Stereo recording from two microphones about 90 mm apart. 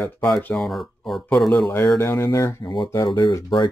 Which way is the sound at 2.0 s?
30° left (ahead or behind).